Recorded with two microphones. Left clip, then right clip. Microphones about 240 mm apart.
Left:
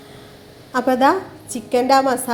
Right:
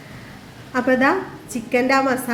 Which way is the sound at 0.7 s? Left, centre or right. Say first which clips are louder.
Left 2 dB; centre.